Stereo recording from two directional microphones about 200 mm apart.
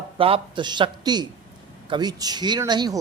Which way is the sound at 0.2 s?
25° right (ahead or behind).